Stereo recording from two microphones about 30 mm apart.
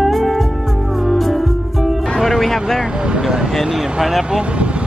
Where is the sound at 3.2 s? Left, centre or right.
Right.